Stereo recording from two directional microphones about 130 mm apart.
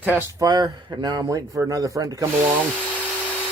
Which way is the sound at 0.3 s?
35° right (ahead or behind).